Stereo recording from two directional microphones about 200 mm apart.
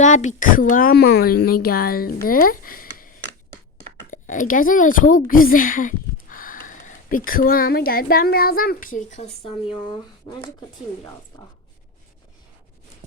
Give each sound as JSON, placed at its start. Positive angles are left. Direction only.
{"t": 0.0, "sound": "speech", "side_deg": 40}
{"t": 2.2, "sound": "a sound", "side_deg": 45}
{"t": 4.1, "sound": "speech", "side_deg": 40}